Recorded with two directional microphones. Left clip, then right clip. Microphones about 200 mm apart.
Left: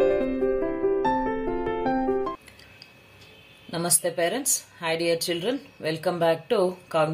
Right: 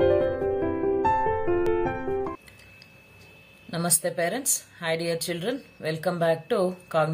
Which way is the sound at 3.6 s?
5° right (ahead or behind).